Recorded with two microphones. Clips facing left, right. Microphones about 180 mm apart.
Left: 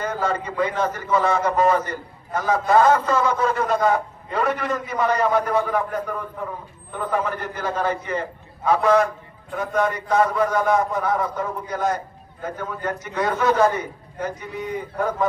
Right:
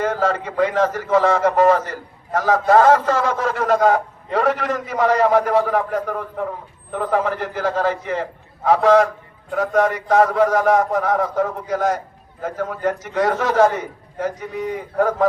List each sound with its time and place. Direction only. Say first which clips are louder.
0.0 s a man's voice: right 4 dB; 90° right